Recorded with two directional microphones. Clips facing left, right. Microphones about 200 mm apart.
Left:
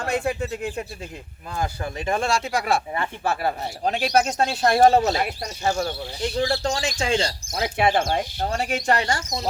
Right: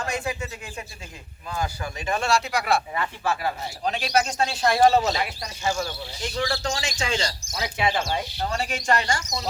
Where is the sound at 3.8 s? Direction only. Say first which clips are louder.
Left 3 dB; 45° left (ahead or behind).